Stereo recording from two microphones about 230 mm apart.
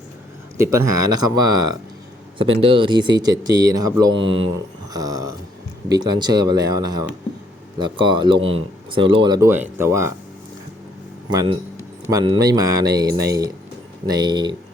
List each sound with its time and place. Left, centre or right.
0.5 s speech: centre
2.4 s speech: right
11.3 s speech: centre